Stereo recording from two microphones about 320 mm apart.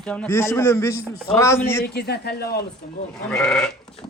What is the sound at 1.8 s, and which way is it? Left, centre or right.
Speech, left.